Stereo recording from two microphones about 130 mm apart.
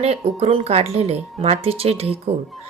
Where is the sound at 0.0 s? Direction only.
50° right (ahead or behind).